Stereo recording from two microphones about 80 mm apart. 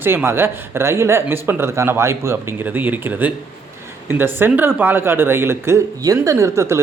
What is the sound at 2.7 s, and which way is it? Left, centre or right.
A man's voice, right.